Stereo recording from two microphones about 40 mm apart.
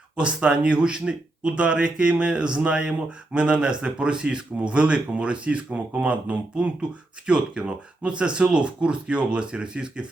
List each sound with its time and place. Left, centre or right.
0.2 s speech: right